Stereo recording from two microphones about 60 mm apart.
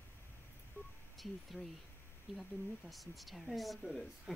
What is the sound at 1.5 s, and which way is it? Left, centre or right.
Speech, centre.